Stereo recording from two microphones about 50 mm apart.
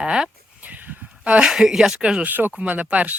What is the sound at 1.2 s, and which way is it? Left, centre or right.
Speech, right.